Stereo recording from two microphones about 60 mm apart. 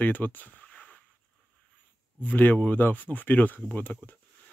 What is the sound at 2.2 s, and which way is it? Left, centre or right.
Speech, left.